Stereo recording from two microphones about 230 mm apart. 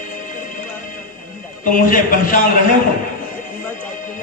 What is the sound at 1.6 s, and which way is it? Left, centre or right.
Speech, left.